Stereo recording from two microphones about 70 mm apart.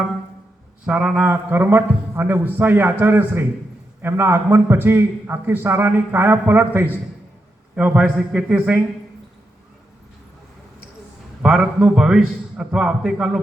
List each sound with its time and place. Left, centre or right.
0.9 s a man's voice: centre
1.2 s a man's voice: right
11.4 s a man's voice: centre